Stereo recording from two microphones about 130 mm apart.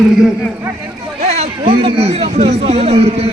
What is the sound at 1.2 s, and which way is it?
A man's voice, 55° right (ahead or behind).